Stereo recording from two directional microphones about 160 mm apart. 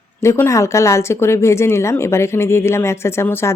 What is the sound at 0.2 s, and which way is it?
Speech, 15° left (ahead or behind).